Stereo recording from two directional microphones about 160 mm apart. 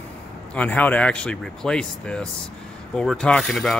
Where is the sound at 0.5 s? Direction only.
10° left (ahead or behind).